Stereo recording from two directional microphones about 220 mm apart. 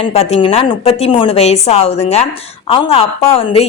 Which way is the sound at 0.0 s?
30° left (ahead or behind).